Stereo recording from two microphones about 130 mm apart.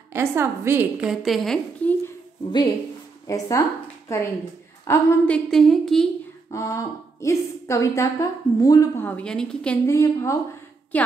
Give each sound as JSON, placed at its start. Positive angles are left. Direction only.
{"t": 0.1, "sound": "a woman's voice", "side_deg": -20}
{"t": 0.9, "sound": "a woman's voice", "side_deg": -5}
{"t": 3.3, "sound": "a woman's voice", "side_deg": 25}
{"t": 6.5, "sound": "a woman's voice", "side_deg": 25}
{"t": 9.0, "sound": "a woman's voice", "side_deg": 10}
{"t": 9.8, "sound": "a woman's voice", "side_deg": 20}